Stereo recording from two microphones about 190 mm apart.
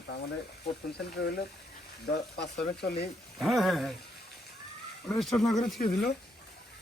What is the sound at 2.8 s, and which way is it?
Speech, 55° left (ahead or behind).